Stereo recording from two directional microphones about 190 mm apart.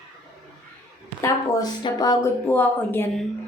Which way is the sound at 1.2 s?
20° left (ahead or behind).